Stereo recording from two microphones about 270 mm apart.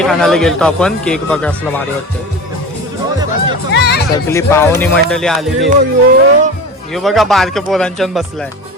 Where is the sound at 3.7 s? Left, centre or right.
Left.